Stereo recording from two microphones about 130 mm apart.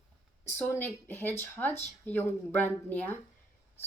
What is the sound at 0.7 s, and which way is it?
Speech, 15° left (ahead or behind).